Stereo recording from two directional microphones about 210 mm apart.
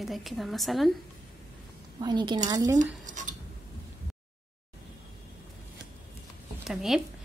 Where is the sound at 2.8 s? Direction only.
35° right (ahead or behind).